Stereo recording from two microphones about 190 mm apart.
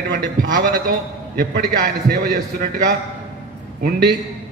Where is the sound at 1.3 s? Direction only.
55° right (ahead or behind).